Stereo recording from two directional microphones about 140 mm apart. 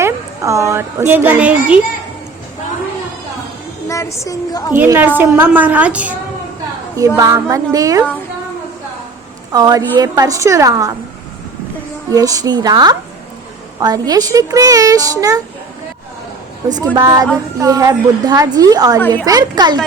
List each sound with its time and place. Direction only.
0.0 s a woman's voice: 20° right (ahead or behind)
3.8 s a woman's voice: 20° left (ahead or behind)
4.9 s a woman's voice: 15° right (ahead or behind)
7.2 s a woman's voice: 25° right (ahead or behind)
9.5 s a woman's voice: 25° right (ahead or behind)
12.1 s a woman's voice: 25° right (ahead or behind)
16.6 s a woman's voice: 30° right (ahead or behind)
18.9 s a woman's voice: 15° left (ahead or behind)
19.2 s a woman's voice: 25° right (ahead or behind)